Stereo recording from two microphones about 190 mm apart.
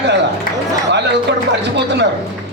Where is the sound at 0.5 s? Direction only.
50° left (ahead or behind).